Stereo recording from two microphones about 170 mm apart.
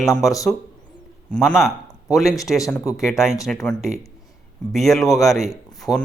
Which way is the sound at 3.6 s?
Centre (ahead or behind).